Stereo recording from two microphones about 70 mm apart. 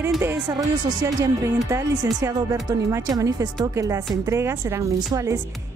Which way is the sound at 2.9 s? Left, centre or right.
Right.